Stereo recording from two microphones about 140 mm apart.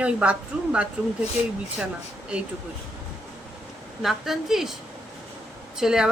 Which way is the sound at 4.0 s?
Centre (ahead or behind).